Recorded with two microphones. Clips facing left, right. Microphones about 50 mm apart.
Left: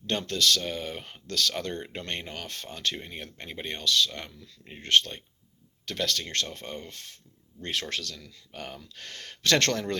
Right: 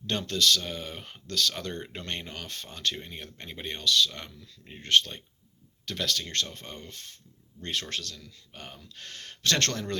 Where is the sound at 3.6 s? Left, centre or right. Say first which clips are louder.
Right 1 dB; left.